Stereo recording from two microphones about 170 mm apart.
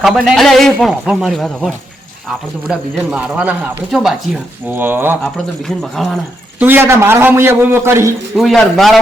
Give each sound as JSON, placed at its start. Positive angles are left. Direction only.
{"t": 0.0, "sound": "a man's voice", "side_deg": 0}
{"t": 5.2, "sound": "a man's voice", "side_deg": 0}
{"t": 6.6, "sound": "a man's voice", "side_deg": -10}
{"t": 8.4, "sound": "a man's voice", "side_deg": 0}